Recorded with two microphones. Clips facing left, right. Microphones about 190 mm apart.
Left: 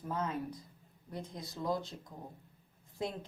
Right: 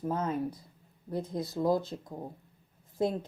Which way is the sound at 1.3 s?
30° right (ahead or behind).